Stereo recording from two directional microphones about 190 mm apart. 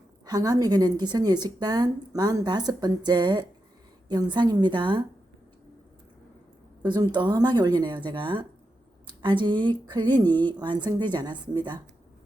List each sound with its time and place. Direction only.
0.3 s speech: 20° right (ahead or behind)
6.8 s speech: 20° right (ahead or behind)